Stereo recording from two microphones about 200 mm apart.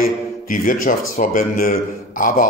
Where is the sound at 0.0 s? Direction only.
45° left (ahead or behind).